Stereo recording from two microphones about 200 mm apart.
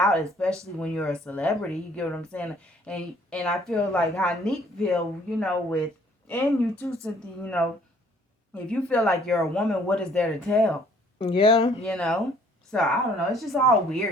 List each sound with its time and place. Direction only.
0.4 s a woman's voice: 5° left (ahead or behind)
11.2 s speech: 25° left (ahead or behind)
11.8 s a woman's voice: centre (ahead or behind)